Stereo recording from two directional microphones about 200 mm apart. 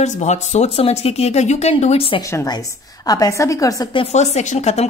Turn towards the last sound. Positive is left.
turn(degrees=35)  # may be behind; listen again after turning